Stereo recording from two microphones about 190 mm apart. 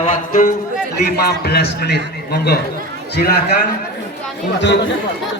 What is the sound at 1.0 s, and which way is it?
A man's voice, 55° left (ahead or behind).